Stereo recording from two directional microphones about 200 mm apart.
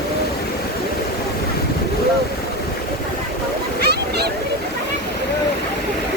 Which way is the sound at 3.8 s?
55° right (ahead or behind).